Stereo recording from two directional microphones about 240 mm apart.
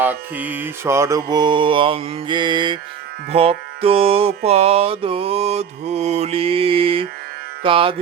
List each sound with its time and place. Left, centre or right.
0.0 s mantra: centre